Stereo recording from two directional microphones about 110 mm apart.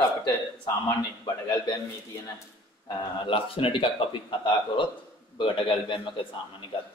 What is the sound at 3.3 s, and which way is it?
Speech, 55° left (ahead or behind).